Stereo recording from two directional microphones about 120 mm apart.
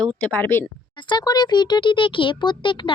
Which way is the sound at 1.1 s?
35° left (ahead or behind).